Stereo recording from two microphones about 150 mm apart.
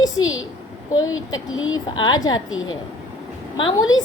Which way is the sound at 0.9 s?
25° left (ahead or behind).